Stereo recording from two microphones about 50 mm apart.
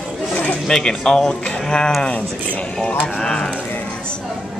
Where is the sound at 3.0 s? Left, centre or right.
Centre.